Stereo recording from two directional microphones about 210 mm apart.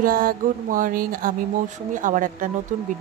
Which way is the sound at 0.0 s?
40° right (ahead or behind).